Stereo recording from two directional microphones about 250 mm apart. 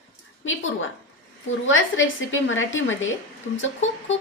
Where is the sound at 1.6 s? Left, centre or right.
Left.